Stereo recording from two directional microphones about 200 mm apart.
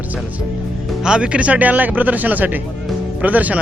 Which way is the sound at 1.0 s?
5° right (ahead or behind).